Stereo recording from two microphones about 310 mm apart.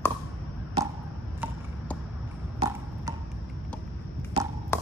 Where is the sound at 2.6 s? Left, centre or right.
Centre.